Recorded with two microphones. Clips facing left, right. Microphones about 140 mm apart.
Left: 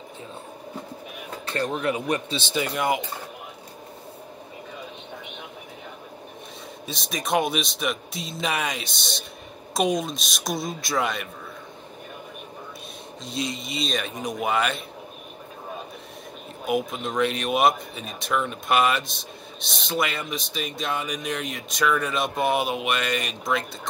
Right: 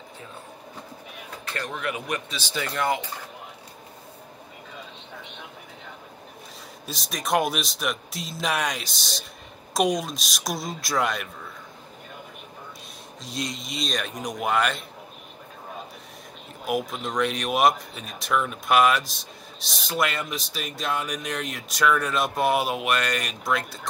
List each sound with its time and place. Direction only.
1.5 s speech: 30° left (ahead or behind); by 3.0 s 15° left (ahead or behind)
6.9 s speech: centre (ahead or behind)
13.2 s speech: centre (ahead or behind)
16.6 s speech: centre (ahead or behind)